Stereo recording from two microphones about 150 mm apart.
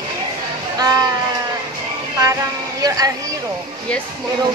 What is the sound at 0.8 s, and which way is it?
Speech, 25° right (ahead or behind).